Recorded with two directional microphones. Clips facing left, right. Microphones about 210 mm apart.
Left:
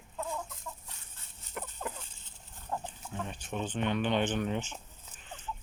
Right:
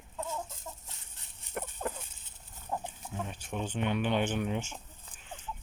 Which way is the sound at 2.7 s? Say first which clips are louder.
Right 1 dB; 15° right (ahead or behind).